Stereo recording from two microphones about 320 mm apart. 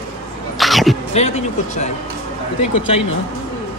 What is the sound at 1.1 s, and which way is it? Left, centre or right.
Speech, left.